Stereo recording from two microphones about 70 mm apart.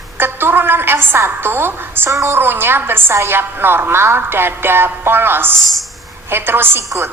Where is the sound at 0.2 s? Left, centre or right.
Right.